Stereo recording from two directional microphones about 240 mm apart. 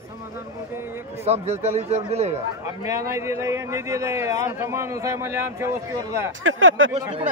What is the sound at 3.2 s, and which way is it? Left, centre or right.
A man's voice, centre.